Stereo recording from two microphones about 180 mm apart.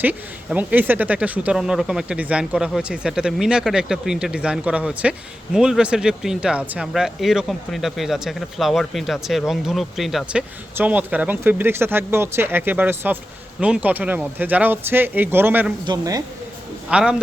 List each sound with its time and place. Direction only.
0.0 s speech: 10° right (ahead or behind)
16.9 s speech: 5° right (ahead or behind)